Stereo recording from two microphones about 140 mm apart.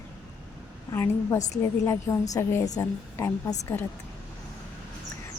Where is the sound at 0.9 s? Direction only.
20° left (ahead or behind).